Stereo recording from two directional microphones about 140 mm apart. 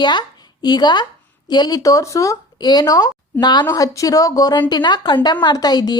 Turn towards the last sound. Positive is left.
turn(degrees=30)  # may be behind; listen again after turning